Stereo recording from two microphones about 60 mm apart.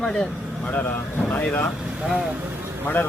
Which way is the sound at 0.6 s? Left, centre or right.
Left.